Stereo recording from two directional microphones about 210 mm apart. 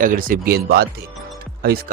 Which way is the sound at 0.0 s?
40° right (ahead or behind).